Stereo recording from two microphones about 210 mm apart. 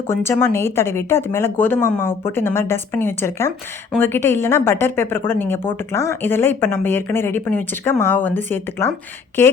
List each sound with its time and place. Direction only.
0.1 s a woman's voice: 10° left (ahead or behind)